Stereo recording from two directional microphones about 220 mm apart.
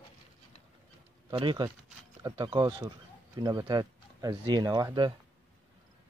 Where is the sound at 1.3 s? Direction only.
20° right (ahead or behind).